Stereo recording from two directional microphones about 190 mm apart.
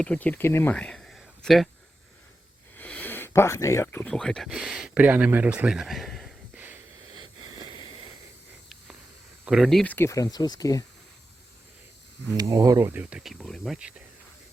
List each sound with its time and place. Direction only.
0.0 s speech: 5° left (ahead or behind)
2.7 s speech: 10° left (ahead or behind)
7.2 s a sound: 25° right (ahead or behind)
9.4 s speech: 5° right (ahead or behind); by 10.8 s 20° left (ahead or behind)
12.4 s speech: 15° right (ahead or behind)